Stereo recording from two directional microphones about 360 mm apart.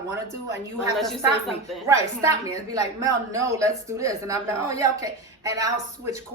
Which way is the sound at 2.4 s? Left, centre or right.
Centre.